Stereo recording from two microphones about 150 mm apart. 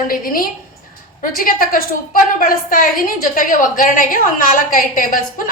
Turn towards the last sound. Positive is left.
turn(degrees=65)  # may be behind; listen again after turning